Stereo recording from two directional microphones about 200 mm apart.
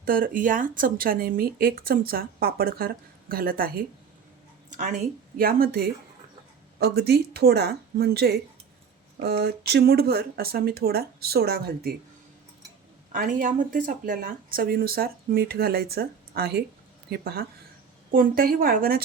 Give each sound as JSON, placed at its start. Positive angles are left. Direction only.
{"t": 0.0, "sound": "speech", "side_deg": -45}
{"t": 13.1, "sound": "speech", "side_deg": -40}